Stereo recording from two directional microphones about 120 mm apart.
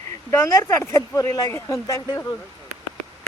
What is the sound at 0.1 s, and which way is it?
Speech, 25° left (ahead or behind).